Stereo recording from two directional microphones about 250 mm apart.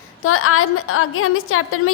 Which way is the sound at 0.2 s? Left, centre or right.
Left.